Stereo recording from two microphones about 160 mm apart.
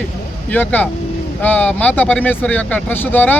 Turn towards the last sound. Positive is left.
turn(degrees=10)  # may be behind; listen again after turning